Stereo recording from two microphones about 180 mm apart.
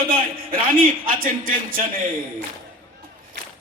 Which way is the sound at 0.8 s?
50° right (ahead or behind).